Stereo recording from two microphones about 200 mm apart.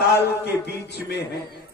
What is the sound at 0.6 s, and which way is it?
Speech, 55° left (ahead or behind).